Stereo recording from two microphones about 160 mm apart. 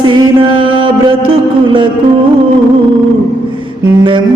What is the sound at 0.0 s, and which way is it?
Music, 30° right (ahead or behind).